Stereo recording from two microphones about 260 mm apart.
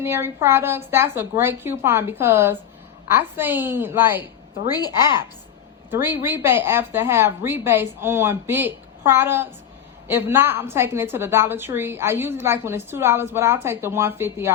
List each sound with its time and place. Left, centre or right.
0.0 s a woman's voice: centre
4.7 s a woman's voice: centre
5.9 s a woman's voice: centre